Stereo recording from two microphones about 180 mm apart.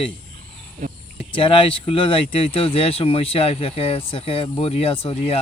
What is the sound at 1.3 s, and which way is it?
Speech, 30° left (ahead or behind).